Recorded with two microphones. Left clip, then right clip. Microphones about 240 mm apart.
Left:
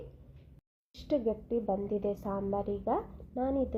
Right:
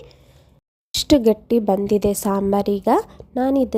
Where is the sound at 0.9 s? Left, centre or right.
Right.